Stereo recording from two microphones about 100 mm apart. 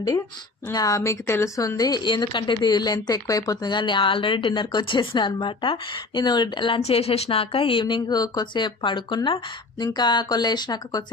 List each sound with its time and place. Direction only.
0.7 s speech: 35° left (ahead or behind); by 6.8 s 55° left (ahead or behind)
6.8 s speech: 85° left; by 9.4 s 60° left (ahead or behind)
9.7 s speech: 45° left (ahead or behind)